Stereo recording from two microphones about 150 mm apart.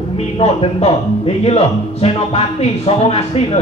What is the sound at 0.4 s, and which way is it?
Speech, 40° left (ahead or behind).